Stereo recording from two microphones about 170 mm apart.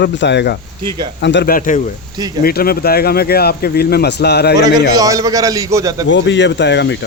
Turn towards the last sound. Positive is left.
turn(degrees=90)